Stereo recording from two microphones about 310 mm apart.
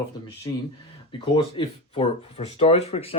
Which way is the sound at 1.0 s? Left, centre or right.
Centre.